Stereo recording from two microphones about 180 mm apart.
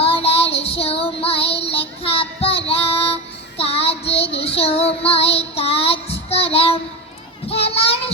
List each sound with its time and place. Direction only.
0.0 s child singing: 35° left (ahead or behind)
7.4 s children playing: 35° left (ahead or behind)